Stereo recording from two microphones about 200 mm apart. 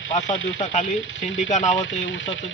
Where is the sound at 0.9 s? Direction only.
75° left (ahead or behind).